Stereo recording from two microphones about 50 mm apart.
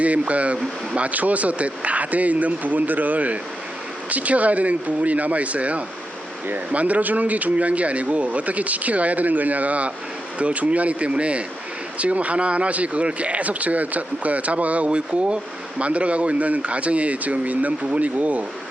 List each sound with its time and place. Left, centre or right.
0.0 s speech: right